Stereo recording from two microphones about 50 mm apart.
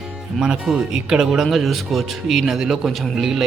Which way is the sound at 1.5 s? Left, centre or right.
Centre.